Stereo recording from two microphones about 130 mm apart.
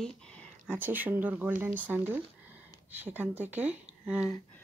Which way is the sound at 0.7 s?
15° right (ahead or behind).